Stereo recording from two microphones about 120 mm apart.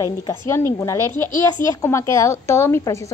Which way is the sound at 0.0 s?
25° left (ahead or behind).